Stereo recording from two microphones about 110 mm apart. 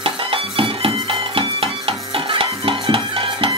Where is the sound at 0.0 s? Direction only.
55° right (ahead or behind).